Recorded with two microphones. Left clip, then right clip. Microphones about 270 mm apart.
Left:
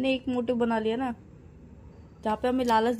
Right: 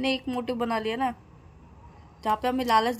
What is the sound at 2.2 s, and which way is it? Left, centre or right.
Speech, right.